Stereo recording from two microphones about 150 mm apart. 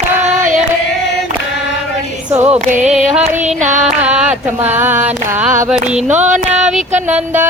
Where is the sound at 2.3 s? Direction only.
15° right (ahead or behind).